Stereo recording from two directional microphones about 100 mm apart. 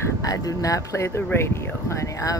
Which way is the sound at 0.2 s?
35° left (ahead or behind).